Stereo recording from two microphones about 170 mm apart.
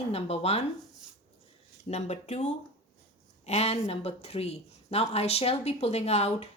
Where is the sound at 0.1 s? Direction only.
35° left (ahead or behind).